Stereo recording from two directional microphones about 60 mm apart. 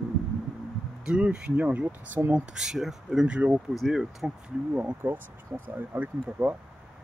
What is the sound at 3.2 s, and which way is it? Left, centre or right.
Speech, right.